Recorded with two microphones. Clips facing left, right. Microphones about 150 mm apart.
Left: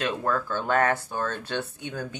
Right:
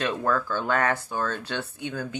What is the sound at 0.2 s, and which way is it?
Speech, 25° left (ahead or behind).